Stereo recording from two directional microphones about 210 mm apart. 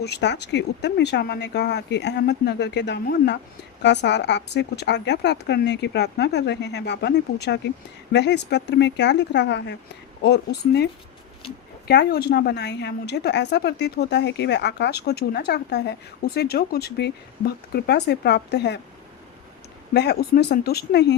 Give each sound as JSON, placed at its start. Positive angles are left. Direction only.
{"t": 0.0, "sound": "a woman's voice", "side_deg": 55}
{"t": 11.9, "sound": "a woman's voice", "side_deg": 50}
{"t": 19.9, "sound": "a woman's voice", "side_deg": 50}